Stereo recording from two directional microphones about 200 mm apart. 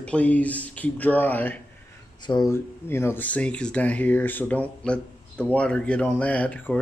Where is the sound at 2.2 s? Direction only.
20° left (ahead or behind).